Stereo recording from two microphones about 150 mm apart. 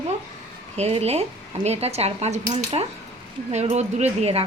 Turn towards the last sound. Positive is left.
turn(degrees=-45)  # may be behind; listen again after turning